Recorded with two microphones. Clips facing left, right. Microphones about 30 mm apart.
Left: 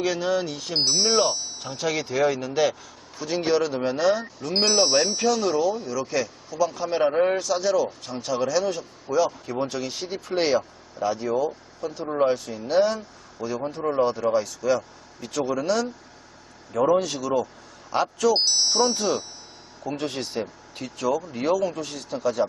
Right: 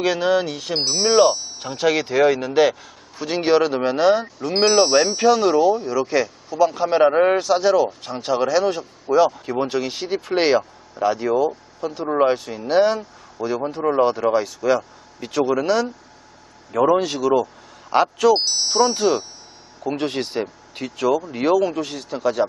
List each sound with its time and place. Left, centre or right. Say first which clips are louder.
0.0 s speech: right 5 dB; right
0.7 s speech: right 2 dB; centre
1.1 s speech: right 10 dB; centre
1.6 s speech: right 8 dB; right
4.5 s speech: right 5 dB; centre; by 18.3 s right
18.3 s speech: right 1 dB; centre
18.8 s speech: right 5 dB; centre